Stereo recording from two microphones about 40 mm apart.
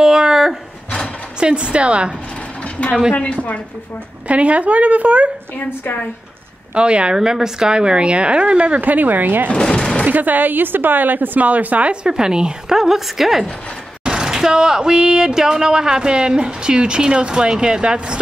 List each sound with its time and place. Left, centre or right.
0.0 s speech: centre
1.4 s speech: right
4.3 s speech: right
6.7 s speech: right
7.2 s speech: centre
8.8 s a woman's voice: right
9.5 s a sound: left
10.0 s a woman's voice: right
11.9 s a woman's voice: right; by 13.5 s centre
14.0 s speech: centre